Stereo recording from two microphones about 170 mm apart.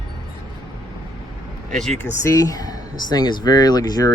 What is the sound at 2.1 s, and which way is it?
Speech, 20° left (ahead or behind).